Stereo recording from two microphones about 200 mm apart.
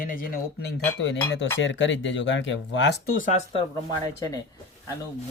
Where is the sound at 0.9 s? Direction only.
65° left (ahead or behind); by 3.4 s 40° left (ahead or behind).